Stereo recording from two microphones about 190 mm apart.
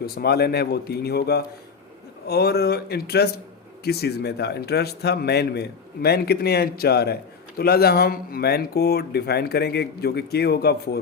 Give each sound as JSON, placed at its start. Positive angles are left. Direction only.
{"t": 0.0, "sound": "speech", "side_deg": 55}